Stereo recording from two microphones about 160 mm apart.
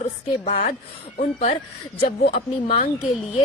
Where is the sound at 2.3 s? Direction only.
40° left (ahead or behind).